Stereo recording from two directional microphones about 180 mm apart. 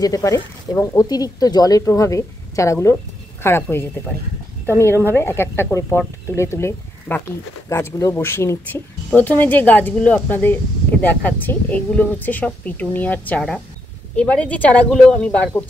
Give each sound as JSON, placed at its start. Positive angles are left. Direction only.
{"t": 0.0, "sound": "speech", "side_deg": 20}